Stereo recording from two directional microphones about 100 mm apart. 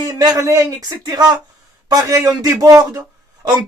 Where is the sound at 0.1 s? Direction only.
40° right (ahead or behind).